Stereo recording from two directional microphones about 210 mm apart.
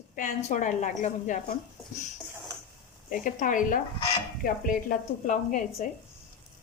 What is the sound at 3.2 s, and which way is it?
Speech, 40° left (ahead or behind).